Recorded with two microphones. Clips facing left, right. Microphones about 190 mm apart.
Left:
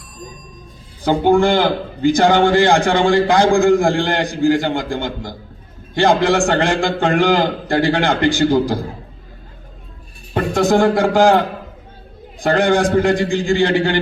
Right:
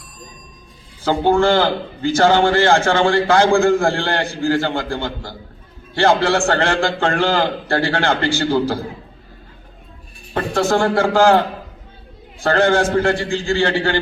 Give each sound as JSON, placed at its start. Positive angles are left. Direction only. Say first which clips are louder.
{"t": 1.0, "sound": "a man's voice", "louder": "left 2 dB", "side_deg": 15}
{"t": 10.3, "sound": "a man's voice", "louder": "left 3 dB", "side_deg": 15}